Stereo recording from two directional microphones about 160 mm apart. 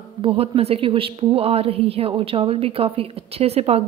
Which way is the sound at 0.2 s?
35° right (ahead or behind).